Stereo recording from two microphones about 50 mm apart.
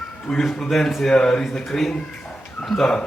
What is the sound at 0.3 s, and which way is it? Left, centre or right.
A man's voice, centre.